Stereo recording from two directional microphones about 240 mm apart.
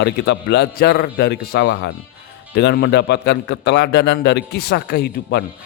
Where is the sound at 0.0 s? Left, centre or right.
Left.